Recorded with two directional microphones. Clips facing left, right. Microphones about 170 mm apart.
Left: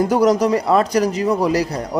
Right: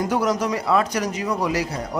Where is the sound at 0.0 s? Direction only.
35° left (ahead or behind).